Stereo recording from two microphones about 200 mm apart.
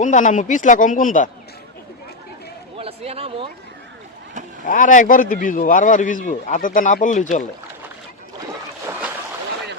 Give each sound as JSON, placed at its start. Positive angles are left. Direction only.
{"t": 0.0, "sound": "speech", "side_deg": 40}
{"t": 2.7, "sound": "speech", "side_deg": -30}
{"t": 4.6, "sound": "speech", "side_deg": 40}
{"t": 8.9, "sound": "boat", "side_deg": -10}